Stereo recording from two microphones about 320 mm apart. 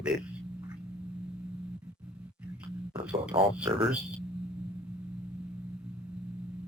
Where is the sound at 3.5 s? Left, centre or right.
Centre.